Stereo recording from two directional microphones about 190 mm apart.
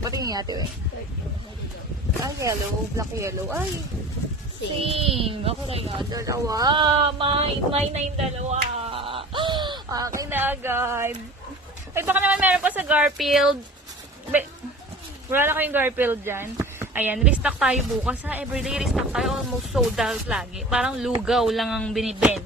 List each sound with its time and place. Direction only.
0.0 s speech: 20° right (ahead or behind)
2.2 s speech: 15° right (ahead or behind)
4.8 s speech: 30° right (ahead or behind)
10.2 s speech: 10° right (ahead or behind)
15.3 s a woman's voice: 10° right (ahead or behind)